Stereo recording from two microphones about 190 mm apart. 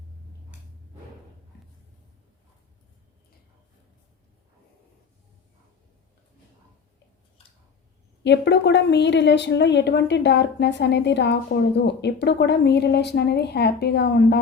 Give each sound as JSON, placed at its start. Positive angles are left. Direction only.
{"t": 8.2, "sound": "a woman's voice", "side_deg": 65}